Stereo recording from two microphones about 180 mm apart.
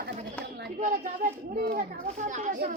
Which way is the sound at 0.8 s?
45° right (ahead or behind).